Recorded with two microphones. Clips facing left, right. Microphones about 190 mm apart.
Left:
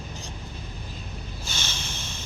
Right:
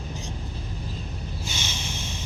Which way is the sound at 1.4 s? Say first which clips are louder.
Right 2 dB; 15° right (ahead or behind).